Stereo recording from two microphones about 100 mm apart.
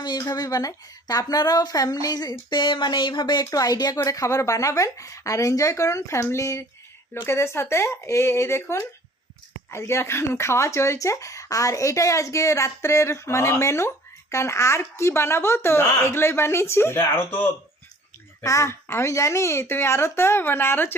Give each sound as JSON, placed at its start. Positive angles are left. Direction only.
{"t": 0.0, "sound": "speech", "side_deg": 45}
{"t": 2.5, "sound": "speech", "side_deg": 55}
{"t": 3.5, "sound": "speech", "side_deg": 40}
{"t": 18.4, "sound": "speech", "side_deg": 30}